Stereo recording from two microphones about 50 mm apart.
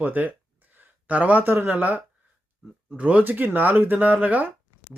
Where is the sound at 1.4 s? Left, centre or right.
Right.